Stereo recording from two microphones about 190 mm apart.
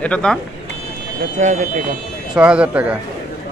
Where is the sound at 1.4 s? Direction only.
40° right (ahead or behind).